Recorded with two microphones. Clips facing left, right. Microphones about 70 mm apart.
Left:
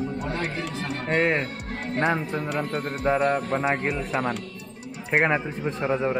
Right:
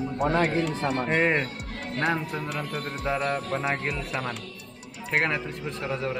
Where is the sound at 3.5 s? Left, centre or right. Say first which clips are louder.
Left 4 dB; left.